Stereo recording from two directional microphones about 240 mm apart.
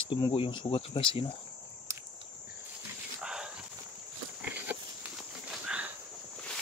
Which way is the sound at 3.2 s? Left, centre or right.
Centre.